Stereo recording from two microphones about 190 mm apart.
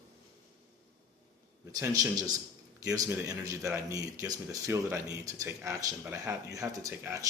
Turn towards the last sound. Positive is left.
turn(degrees=-15)  # may be behind; listen again after turning